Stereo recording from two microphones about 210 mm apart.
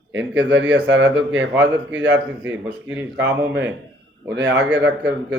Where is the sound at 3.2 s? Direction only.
60° right (ahead or behind).